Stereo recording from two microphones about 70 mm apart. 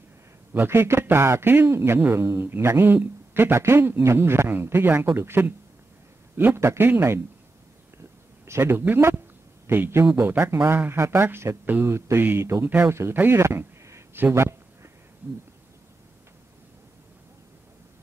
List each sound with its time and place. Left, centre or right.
0.5 s speech: right
8.5 s speech: right
12.6 s speech: right
13.4 s a sound: right